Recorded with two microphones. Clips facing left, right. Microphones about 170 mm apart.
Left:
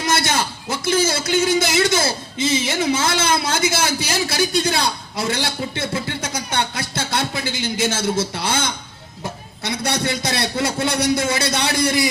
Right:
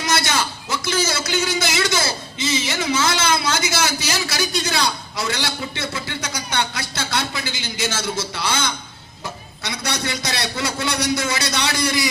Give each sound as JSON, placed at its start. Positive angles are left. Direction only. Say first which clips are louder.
{"t": 0.0, "sound": "a man's voice", "louder": "left 1 dB", "side_deg": 55}